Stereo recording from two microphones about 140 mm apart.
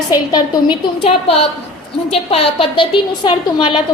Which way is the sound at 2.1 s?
45° left (ahead or behind).